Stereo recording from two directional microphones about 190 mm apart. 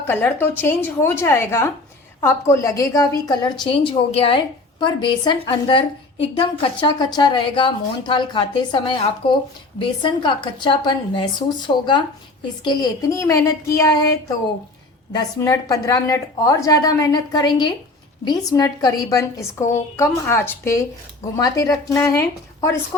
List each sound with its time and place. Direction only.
0.0 s a woman's voice: 10° left (ahead or behind)